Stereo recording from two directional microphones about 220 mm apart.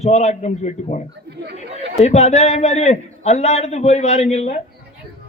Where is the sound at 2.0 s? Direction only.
30° left (ahead or behind).